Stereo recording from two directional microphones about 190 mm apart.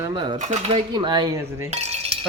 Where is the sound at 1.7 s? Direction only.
35° right (ahead or behind).